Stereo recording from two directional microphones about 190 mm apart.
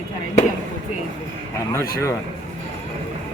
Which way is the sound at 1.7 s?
15° left (ahead or behind).